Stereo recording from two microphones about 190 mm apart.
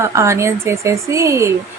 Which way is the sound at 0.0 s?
15° right (ahead or behind).